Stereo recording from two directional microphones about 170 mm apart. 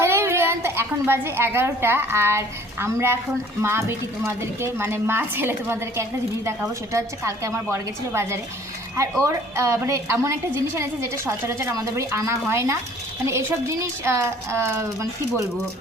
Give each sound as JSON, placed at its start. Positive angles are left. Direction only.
{"t": 0.0, "sound": "a woman's voice", "side_deg": -15}